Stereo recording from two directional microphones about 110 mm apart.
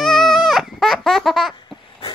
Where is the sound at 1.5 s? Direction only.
45° left (ahead or behind).